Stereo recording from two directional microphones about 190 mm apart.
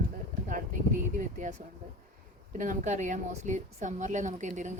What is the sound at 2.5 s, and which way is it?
A woman's voice, 40° right (ahead or behind).